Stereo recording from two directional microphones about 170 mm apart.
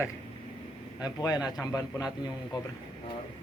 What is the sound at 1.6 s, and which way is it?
Speech, 20° left (ahead or behind).